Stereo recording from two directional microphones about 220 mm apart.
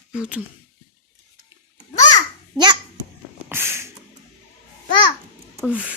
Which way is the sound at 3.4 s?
10° right (ahead or behind).